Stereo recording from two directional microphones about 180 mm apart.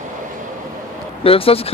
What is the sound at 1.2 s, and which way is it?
Speech, 30° left (ahead or behind).